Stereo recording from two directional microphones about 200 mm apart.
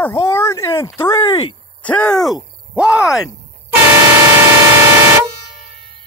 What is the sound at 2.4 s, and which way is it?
Groan, 50° right (ahead or behind).